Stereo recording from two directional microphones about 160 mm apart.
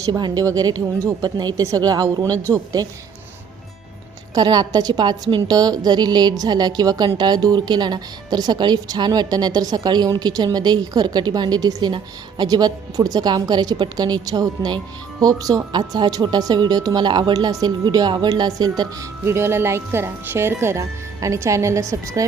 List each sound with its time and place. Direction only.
0.0 s a woman's voice: 25° right (ahead or behind)
4.4 s a woman's voice: 25° right (ahead or behind)